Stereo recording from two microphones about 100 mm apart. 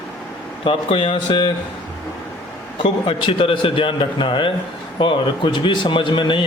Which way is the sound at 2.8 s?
60° left (ahead or behind).